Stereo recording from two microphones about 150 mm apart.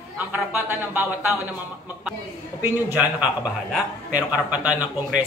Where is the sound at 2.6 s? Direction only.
10° right (ahead or behind).